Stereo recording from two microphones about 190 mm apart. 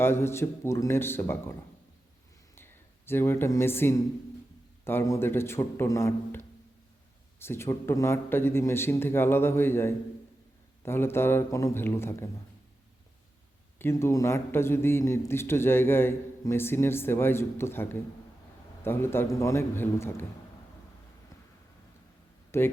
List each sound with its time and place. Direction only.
0.0 s a man's voice: 15° left (ahead or behind)
2.6 s a man's voice: 10° left (ahead or behind)
13.7 s a man's voice: 15° left (ahead or behind)
22.5 s a man's voice: 15° left (ahead or behind)